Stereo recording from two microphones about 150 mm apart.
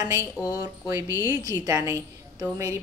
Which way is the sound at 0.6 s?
20° right (ahead or behind).